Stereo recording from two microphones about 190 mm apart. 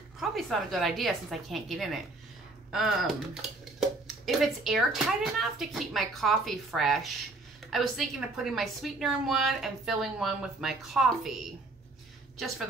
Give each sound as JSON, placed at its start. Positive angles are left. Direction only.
{"t": 0.2, "sound": "a woman's voice", "side_deg": 0}
{"t": 4.3, "sound": "a woman's voice", "side_deg": 0}